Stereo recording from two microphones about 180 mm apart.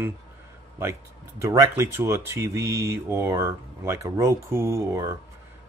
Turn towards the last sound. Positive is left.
turn(degrees=-15)  # may be behind; listen again after turning